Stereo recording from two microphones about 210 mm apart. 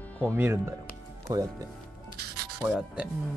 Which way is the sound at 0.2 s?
10° right (ahead or behind).